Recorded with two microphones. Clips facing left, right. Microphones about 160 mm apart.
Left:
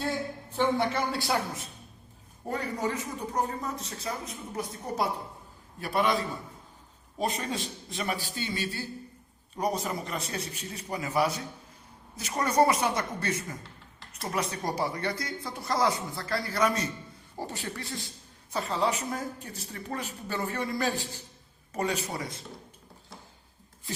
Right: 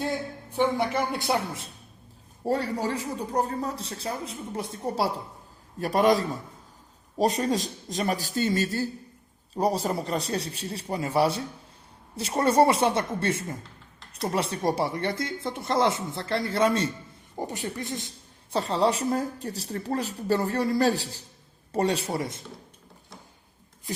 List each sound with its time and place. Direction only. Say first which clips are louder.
0.5 s a woman's voice: right 2 dB; 15° right (ahead or behind); by 5.1 s 30° right (ahead or behind)
5.8 s a man's voice: right 6 dB; 40° right (ahead or behind); by 18.1 s 20° right (ahead or behind)
18.5 s a man's voice: right 5 dB; 30° right (ahead or behind)